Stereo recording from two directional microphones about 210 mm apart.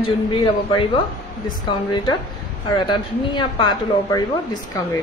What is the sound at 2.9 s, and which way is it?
A woman's voice, 25° left (ahead or behind).